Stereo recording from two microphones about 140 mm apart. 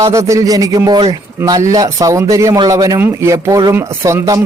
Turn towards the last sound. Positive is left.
turn(degrees=-20)  # may be behind; listen again after turning